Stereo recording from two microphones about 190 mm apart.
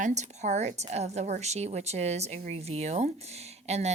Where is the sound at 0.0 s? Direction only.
40° right (ahead or behind).